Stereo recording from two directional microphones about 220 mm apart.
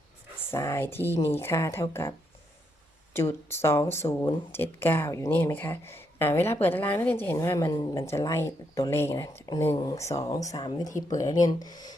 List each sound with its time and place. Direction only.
0.5 s speech: 10° left (ahead or behind)